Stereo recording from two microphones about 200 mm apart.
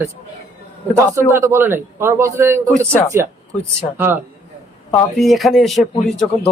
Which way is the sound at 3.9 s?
10° right (ahead or behind).